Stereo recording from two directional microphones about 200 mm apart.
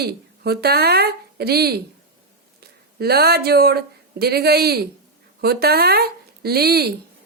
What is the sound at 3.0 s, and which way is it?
Speech, 50° right (ahead or behind).